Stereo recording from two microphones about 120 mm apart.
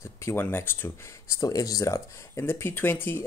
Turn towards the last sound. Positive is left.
turn(degrees=20)  # may be behind; listen again after turning